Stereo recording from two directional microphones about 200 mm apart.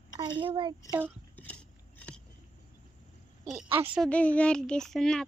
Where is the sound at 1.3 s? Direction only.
10° left (ahead or behind).